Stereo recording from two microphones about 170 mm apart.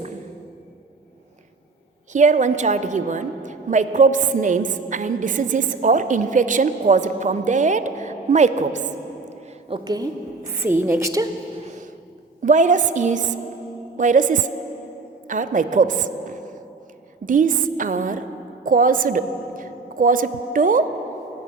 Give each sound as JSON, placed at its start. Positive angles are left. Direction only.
{"t": 2.1, "sound": "a woman's voice", "side_deg": -45}
{"t": 9.6, "sound": "a woman's voice", "side_deg": -30}
{"t": 12.4, "sound": "a woman's voice", "side_deg": -45}